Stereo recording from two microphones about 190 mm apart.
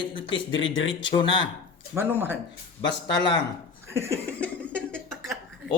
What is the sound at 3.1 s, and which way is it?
Speech, 25° left (ahead or behind).